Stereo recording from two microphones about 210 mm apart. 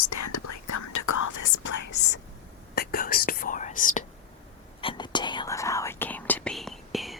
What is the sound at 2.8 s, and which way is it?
Whispering, 45° left (ahead or behind).